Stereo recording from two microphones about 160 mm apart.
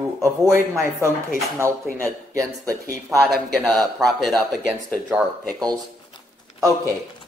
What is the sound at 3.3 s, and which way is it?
Speech, centre (ahead or behind).